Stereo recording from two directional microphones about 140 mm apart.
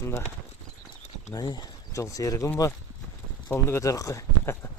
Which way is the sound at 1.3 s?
30° left (ahead or behind).